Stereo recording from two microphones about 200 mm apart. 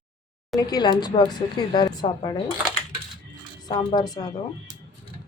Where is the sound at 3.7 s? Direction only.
20° left (ahead or behind).